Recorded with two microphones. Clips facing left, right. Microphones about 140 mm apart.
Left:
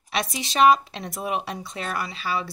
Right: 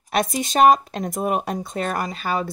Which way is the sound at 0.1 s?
50° right (ahead or behind).